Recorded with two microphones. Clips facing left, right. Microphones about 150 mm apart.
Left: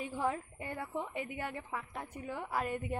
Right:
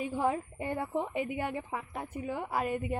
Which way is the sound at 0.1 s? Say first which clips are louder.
Right 5 dB; 15° right (ahead or behind).